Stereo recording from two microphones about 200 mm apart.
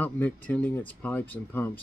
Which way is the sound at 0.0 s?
10° left (ahead or behind).